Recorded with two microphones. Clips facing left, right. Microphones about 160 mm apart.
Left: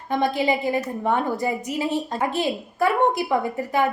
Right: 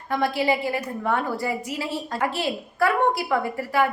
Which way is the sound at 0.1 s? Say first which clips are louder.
Left 1 dB; 20° left (ahead or behind).